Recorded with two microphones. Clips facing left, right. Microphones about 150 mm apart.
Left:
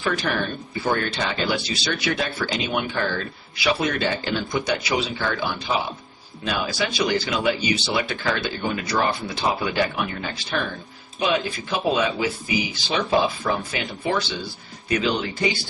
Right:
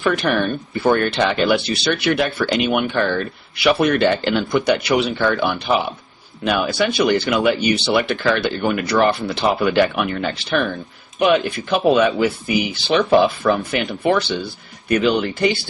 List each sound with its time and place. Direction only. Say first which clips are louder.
0.0 s speech: right 6 dB; 60° right (ahead or behind)